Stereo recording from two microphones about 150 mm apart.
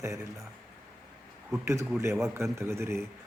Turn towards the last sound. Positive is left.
turn(degrees=-15)  # may be behind; listen again after turning